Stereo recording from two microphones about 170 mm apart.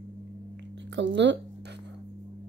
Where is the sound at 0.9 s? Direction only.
90° right.